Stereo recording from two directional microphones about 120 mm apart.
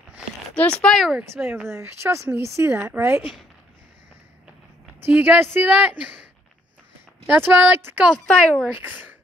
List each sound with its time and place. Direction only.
0.6 s speech: 10° left (ahead or behind)
1.4 s speech: 20° right (ahead or behind)
5.0 s speech: 15° right (ahead or behind)
7.2 s speech: 15° right (ahead or behind)
8.1 s speech: 5° left (ahead or behind)
8.8 s speech: 15° right (ahead or behind)